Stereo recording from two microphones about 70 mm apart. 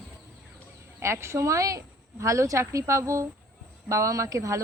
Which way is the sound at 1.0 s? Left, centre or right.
Right.